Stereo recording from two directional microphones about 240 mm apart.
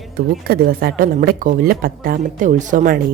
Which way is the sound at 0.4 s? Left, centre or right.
Right.